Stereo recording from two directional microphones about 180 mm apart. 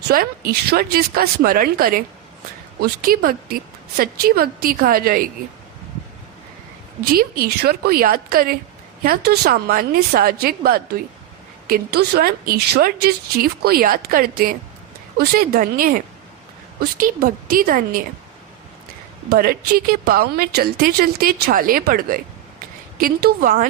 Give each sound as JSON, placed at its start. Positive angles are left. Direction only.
{"t": 0.1, "sound": "a woman's voice", "side_deg": -55}
{"t": 7.0, "sound": "a woman's voice", "side_deg": -60}
{"t": 19.3, "sound": "a woman's voice", "side_deg": -55}